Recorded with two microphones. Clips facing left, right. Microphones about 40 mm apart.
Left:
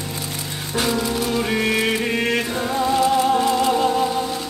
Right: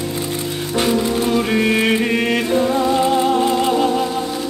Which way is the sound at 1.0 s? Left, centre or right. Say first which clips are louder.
Right 4 dB; right.